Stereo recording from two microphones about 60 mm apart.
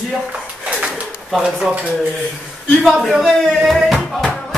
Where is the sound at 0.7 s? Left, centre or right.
Centre.